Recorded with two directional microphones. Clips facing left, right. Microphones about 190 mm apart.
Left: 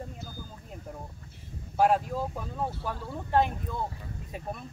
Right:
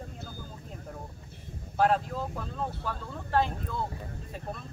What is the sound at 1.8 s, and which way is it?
Speech, 10° left (ahead or behind).